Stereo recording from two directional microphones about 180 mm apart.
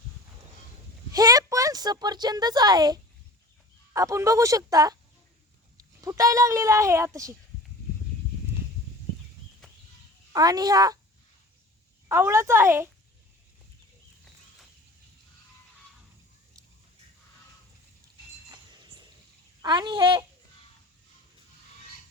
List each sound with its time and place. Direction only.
1.1 s speech: 20° right (ahead or behind)
10.3 s speech: 20° right (ahead or behind)
12.0 s speech: 15° right (ahead or behind)
18.5 s a sound: 25° right (ahead or behind)
19.6 s speech: 25° right (ahead or behind)